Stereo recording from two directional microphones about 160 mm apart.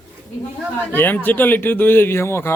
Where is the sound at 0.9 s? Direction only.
10° left (ahead or behind).